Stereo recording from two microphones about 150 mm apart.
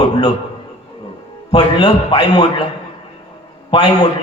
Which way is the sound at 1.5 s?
30° left (ahead or behind).